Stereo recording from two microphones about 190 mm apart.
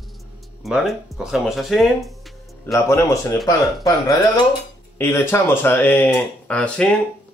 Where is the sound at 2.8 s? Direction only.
15° left (ahead or behind).